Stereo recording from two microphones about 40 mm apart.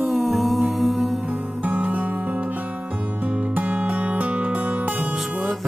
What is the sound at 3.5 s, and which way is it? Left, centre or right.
Music, right.